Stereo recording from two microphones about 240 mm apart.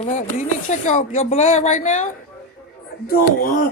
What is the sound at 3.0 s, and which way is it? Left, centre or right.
Speech, left.